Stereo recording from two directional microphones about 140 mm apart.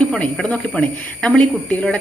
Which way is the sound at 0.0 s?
5° left (ahead or behind).